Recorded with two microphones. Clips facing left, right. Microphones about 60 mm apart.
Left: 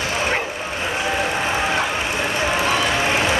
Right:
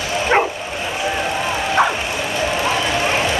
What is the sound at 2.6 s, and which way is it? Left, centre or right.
Run, centre.